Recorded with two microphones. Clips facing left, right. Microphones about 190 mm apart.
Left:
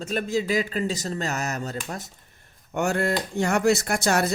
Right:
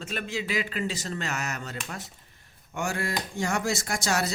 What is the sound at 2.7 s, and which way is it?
Speech, 60° left (ahead or behind).